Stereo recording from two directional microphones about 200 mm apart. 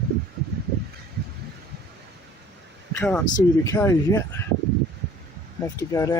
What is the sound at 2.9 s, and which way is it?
Speech, 5° left (ahead or behind).